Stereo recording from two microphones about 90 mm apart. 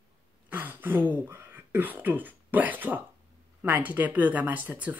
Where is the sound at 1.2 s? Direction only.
20° right (ahead or behind).